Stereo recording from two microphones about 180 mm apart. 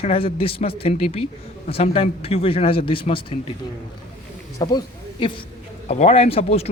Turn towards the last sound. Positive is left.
turn(degrees=35)  # may be behind; listen again after turning